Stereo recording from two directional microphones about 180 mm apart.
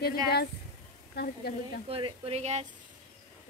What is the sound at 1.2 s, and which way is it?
Speech, 60° left (ahead or behind).